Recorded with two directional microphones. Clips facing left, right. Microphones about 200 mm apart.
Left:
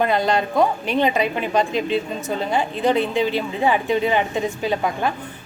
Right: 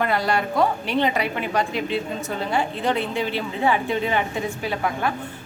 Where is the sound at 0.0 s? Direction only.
20° left (ahead or behind).